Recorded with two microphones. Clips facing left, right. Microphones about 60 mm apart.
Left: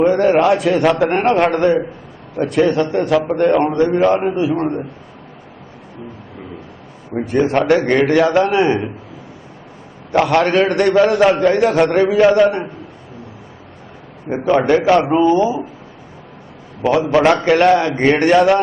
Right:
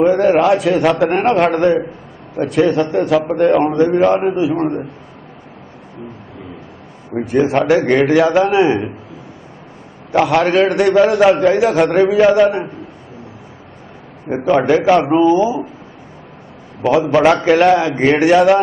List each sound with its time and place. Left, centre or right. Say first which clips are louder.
0.0 s a man's voice: right 1 dB; centre
7.2 s a man's voice: right 1 dB; centre
10.1 s a man's voice: right 1 dB; centre
14.3 s a man's voice: right 1 dB; centre
17.1 s a man's voice: right 1 dB; centre